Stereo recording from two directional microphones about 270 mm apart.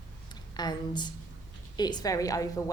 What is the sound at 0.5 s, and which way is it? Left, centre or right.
A woman's voice, centre.